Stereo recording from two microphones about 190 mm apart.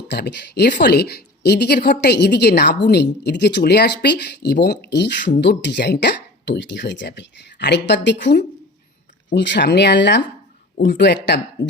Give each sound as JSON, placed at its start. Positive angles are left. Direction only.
{"t": 0.1, "sound": "speech", "side_deg": 60}